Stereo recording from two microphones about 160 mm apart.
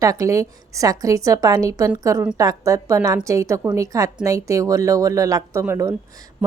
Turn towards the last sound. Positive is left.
turn(degrees=-20)  # may be behind; listen again after turning